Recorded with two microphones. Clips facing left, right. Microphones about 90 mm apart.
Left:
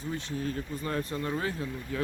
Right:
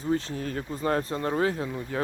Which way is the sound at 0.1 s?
50° right (ahead or behind).